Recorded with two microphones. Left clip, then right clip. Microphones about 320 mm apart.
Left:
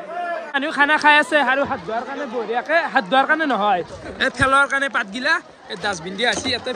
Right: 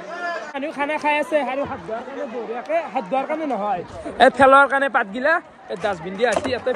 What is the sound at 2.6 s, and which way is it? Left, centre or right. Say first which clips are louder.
Speech: left 4 dB; left.